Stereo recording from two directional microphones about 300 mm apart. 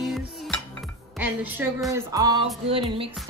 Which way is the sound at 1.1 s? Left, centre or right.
Centre.